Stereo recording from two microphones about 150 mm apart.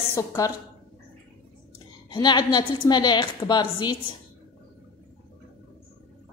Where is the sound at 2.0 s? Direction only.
30° left (ahead or behind).